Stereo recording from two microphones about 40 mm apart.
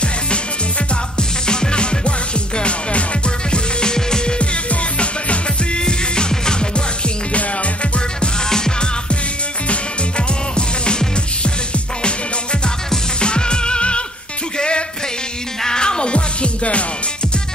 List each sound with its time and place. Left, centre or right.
1.1 s music: left
3.5 s music: centre
4.4 s music: left
5.9 s music: left
8.5 s music: centre
12.6 s music: left